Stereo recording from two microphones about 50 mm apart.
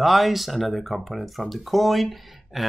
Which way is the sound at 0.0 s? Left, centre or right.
Centre.